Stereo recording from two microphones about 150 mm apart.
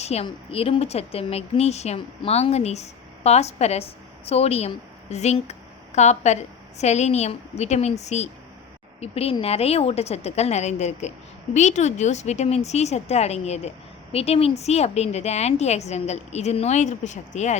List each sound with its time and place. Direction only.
0.0 s a woman's voice: 45° left (ahead or behind)